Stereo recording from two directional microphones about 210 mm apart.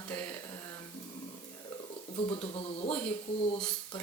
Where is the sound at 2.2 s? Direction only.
30° left (ahead or behind).